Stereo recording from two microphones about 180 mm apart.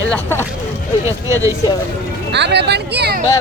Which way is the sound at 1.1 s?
15° right (ahead or behind).